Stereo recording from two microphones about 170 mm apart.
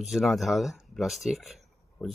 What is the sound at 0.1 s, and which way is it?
Speech, centre (ahead or behind).